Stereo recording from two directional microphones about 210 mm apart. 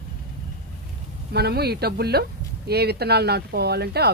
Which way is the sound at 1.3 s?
50° right (ahead or behind).